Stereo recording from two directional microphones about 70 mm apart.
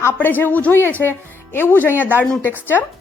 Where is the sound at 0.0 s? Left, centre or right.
Left.